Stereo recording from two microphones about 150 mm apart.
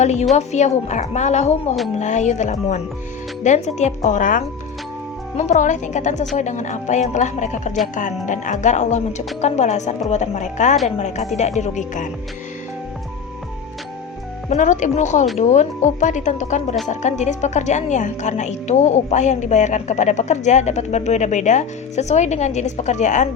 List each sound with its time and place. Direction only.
0.0 s a woman's voice: 50° left (ahead or behind)
14.5 s a woman's voice: 55° left (ahead or behind)